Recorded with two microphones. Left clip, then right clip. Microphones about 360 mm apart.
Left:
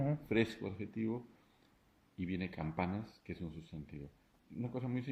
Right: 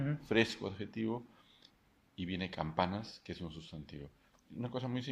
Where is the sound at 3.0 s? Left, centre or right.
Right.